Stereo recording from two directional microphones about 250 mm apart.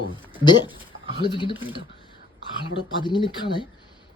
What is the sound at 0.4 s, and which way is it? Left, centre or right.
Speech, centre.